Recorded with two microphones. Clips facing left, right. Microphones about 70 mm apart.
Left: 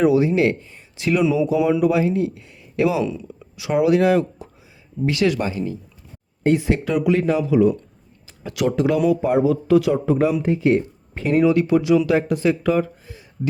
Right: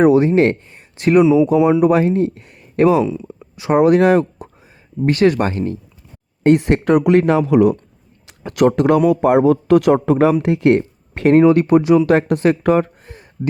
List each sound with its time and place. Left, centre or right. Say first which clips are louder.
0.0 s speech: right 5 dB; right
1.2 s speech: right 6 dB; right
1.8 s speech: right 5 dB; right
2.0 s speech: right 4 dB; right
3.0 s speech: right 5 dB; right
3.5 s speech: right 5 dB; right
8.4 s speech: right 6 dB; right
11.3 s speech: right 4 dB; right
12.1 s speech: right 4 dB; right